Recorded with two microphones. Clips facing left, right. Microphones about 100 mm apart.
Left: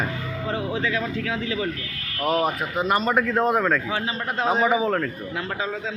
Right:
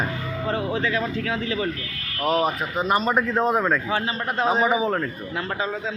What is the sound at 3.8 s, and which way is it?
Speech, 45° right (ahead or behind).